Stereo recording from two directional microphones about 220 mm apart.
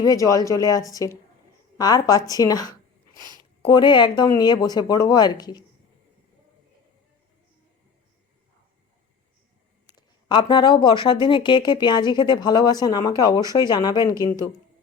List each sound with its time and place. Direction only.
0.0 s speech: 15° left (ahead or behind)
2.3 s a sound: 15° left (ahead or behind)
3.3 s speech: 20° left (ahead or behind)
9.8 s speech: 20° left (ahead or behind)